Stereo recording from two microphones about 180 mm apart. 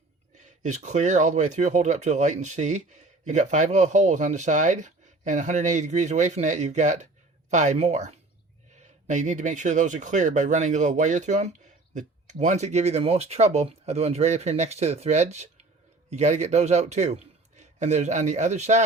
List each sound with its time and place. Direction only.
0.3 s speech: 40° right (ahead or behind)